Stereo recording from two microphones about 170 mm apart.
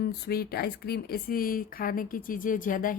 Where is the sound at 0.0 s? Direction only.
65° left (ahead or behind).